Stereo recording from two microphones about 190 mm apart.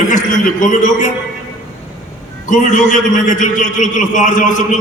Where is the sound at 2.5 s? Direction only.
40° left (ahead or behind).